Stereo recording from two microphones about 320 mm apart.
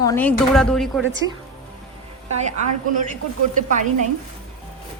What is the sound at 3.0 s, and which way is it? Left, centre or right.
Speech, right.